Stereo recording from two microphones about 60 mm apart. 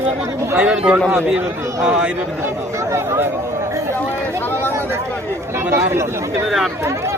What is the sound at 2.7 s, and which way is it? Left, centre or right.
Speech, right.